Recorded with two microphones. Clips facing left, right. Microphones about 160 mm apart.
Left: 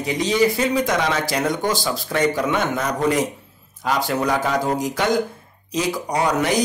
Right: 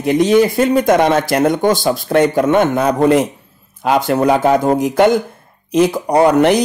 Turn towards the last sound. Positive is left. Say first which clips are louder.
# right 9 dB
turn(degrees=-60)  # may be behind; listen again after turning